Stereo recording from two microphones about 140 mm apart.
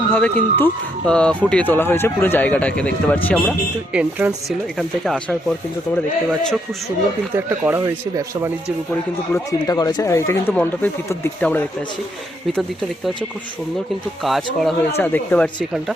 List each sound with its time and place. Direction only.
0.1 s speech: 10° left (ahead or behind)
3.9 s speech: 5° right (ahead or behind)
7.3 s speech: 15° right (ahead or behind)
9.3 s speech: 25° left (ahead or behind)
14.3 s speech: centre (ahead or behind)
14.9 s speech: 15° left (ahead or behind)